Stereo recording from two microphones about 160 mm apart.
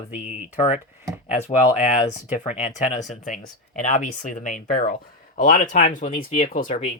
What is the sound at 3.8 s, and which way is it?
Speech, 55° left (ahead or behind).